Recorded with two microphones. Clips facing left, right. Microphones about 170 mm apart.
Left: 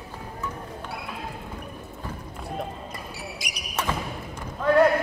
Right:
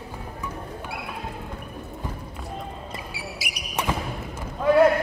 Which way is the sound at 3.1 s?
10° right (ahead or behind).